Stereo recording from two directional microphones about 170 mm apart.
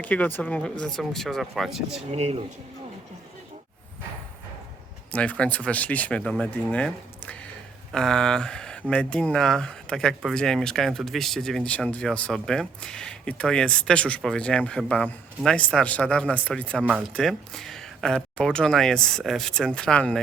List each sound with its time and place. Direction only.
0.0 s speech: 10° left (ahead or behind)
2.1 s speech: 35° right (ahead or behind)
5.1 s speech: 5° left (ahead or behind)
16.8 s speech: 5° right (ahead or behind)